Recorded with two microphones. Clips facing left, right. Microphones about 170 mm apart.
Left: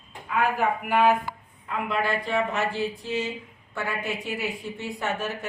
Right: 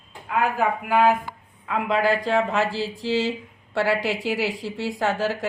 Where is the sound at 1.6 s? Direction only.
90° right.